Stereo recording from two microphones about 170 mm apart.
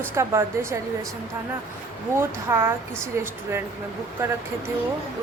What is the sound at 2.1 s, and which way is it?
Speech, 15° right (ahead or behind).